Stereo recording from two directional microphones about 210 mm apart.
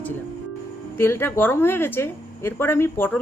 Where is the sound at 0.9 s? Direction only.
10° left (ahead or behind).